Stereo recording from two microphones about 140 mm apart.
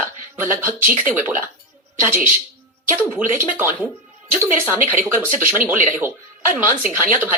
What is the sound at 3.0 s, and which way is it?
Speech, 15° right (ahead or behind).